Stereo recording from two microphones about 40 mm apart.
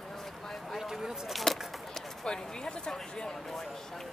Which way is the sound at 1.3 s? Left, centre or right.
Centre.